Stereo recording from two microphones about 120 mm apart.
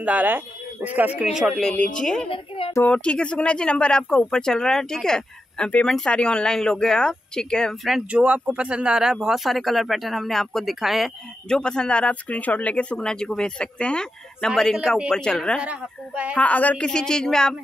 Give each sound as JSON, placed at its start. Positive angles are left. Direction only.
{"t": 0.0, "sound": "speech", "side_deg": -15}
{"t": 1.4, "sound": "speech", "side_deg": 5}
{"t": 2.2, "sound": "a woman's voice", "side_deg": 45}
{"t": 2.7, "sound": "speech", "side_deg": 10}
{"t": 15.5, "sound": "a woman's voice", "side_deg": -10}
{"t": 16.3, "sound": "speech", "side_deg": 10}